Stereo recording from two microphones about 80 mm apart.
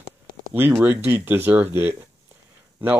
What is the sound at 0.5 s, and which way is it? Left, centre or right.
Speech, right.